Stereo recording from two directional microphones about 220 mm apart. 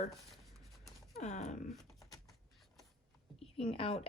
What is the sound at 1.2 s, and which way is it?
Speech, 30° left (ahead or behind).